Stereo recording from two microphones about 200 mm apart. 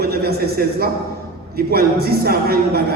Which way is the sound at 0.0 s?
50° right (ahead or behind).